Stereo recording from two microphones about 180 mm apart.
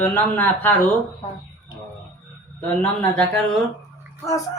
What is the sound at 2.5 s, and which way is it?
Speech, 10° left (ahead or behind).